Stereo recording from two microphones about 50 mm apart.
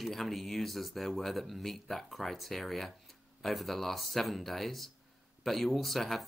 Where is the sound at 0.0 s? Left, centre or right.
Centre.